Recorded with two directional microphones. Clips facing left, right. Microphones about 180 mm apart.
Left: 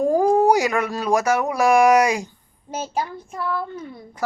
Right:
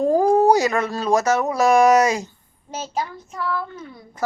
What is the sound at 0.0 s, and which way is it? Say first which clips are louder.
Speech: right 1 dB; 10° left (ahead or behind).